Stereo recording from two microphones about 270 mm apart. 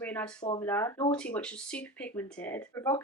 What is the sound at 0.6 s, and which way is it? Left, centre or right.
Speech, centre.